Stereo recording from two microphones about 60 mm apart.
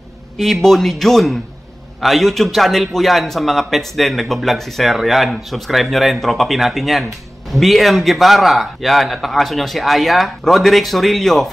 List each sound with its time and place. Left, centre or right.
0.4 s a man's voice: centre